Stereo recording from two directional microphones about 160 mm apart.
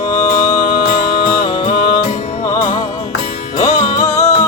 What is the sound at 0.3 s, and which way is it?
Music, 55° left (ahead or behind).